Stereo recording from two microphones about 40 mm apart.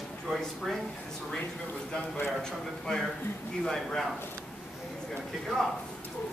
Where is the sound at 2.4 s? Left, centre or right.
Centre.